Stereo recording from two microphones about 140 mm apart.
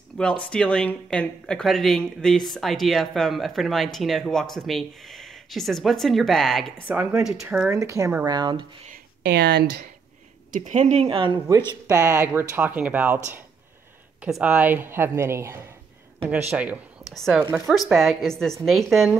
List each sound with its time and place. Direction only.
0.2 s speech: 5° left (ahead or behind)
6.9 s speech: 15° right (ahead or behind)
8.3 s speech: 30° right (ahead or behind)
10.5 s speech: 55° right (ahead or behind); by 11.3 s 40° right (ahead or behind)
12.0 s speech: 20° right (ahead or behind)
14.2 s speech: 10° right (ahead or behind)
17.1 s speech: centre (ahead or behind)
17.4 s speech: 15° right (ahead or behind)
17.6 s speech: centre (ahead or behind)